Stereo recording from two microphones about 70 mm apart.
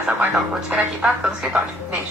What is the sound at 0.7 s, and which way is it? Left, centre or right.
Speech, centre.